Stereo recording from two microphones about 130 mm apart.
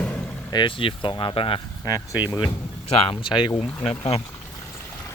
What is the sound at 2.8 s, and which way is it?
Speech, 45° left (ahead or behind).